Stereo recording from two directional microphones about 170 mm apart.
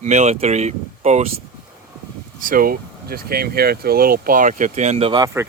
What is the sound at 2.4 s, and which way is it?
Speech, 55° right (ahead or behind).